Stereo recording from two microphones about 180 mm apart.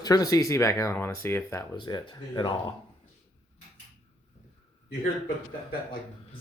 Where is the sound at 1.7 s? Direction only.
25° left (ahead or behind).